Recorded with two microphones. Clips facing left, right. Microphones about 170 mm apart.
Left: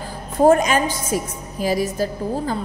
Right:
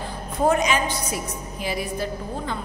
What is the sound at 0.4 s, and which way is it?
A woman's voice, 45° left (ahead or behind).